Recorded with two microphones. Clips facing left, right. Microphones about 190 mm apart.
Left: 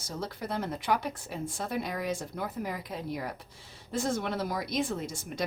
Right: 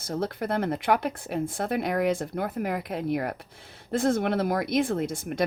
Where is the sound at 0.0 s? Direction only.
55° right (ahead or behind).